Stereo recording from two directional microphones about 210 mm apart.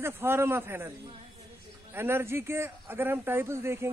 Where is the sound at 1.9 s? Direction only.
10° right (ahead or behind).